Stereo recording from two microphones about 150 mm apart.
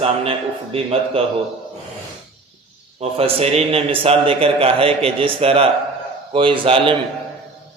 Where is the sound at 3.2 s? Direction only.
45° right (ahead or behind).